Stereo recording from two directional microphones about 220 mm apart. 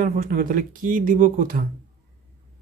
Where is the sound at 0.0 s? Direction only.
40° right (ahead or behind).